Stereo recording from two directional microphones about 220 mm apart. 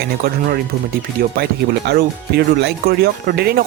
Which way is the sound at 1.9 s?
50° right (ahead or behind).